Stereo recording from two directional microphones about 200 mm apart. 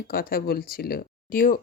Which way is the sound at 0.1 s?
45° left (ahead or behind).